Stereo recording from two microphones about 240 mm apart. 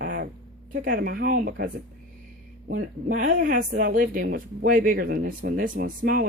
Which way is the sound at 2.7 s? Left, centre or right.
Right.